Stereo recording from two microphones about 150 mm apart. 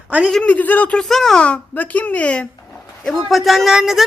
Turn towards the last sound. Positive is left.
turn(degrees=0)  # may be behind; listen again after turning